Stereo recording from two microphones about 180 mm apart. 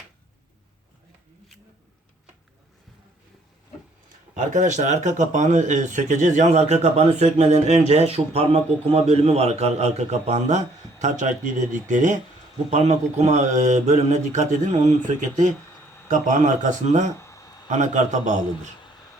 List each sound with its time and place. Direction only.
4.4 s speech: 40° right (ahead or behind)
17.2 s a sound: 15° left (ahead or behind)
17.7 s speech: 45° right (ahead or behind)